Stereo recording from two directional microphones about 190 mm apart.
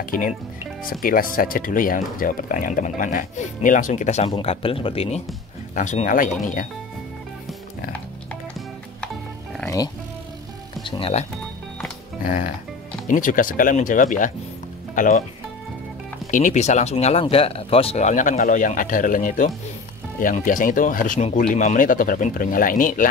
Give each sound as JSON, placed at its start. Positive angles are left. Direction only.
{"t": 0.1, "sound": "speech", "side_deg": 45}
{"t": 5.8, "sound": "speech", "side_deg": 40}
{"t": 10.8, "sound": "speech", "side_deg": 25}
{"t": 12.2, "sound": "speech", "side_deg": 45}
{"t": 16.3, "sound": "speech", "side_deg": 40}